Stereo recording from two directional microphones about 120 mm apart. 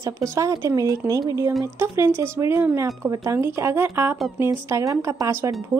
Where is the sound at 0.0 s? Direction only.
25° right (ahead or behind).